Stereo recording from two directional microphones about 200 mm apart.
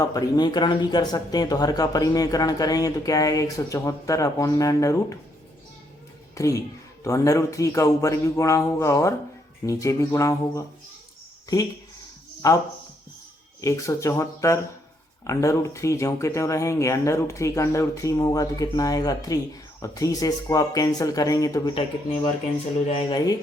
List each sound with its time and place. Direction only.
0.0 s speech: 20° left (ahead or behind)
6.3 s a woman's voice: 15° left (ahead or behind)
12.4 s speech: 15° left (ahead or behind)